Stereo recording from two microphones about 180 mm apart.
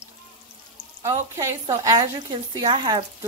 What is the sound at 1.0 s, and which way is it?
Speech, 20° right (ahead or behind).